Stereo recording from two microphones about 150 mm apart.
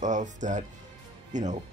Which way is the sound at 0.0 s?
55° right (ahead or behind).